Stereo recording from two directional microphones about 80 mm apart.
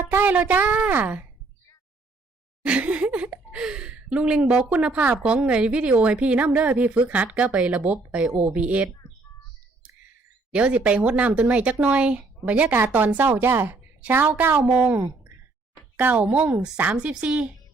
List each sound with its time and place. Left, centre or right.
0.0 s a woman's voice: right
2.6 s speech: centre
10.5 s a woman's voice: centre